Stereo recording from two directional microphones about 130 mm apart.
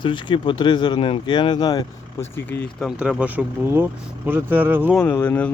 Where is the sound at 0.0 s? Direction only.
40° left (ahead or behind).